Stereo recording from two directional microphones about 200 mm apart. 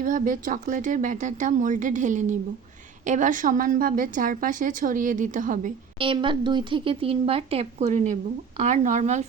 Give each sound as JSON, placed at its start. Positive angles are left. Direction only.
{"t": 0.0, "sound": "speech", "side_deg": -40}
{"t": 6.0, "sound": "speech", "side_deg": -25}